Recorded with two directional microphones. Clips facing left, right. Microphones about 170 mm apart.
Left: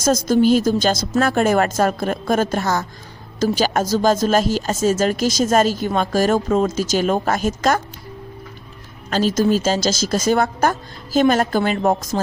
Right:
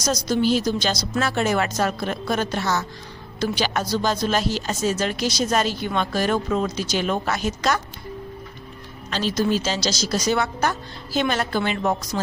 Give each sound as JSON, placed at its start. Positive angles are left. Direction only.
{"t": 0.0, "sound": "speech", "side_deg": 50}
{"t": 9.0, "sound": "speech", "side_deg": 45}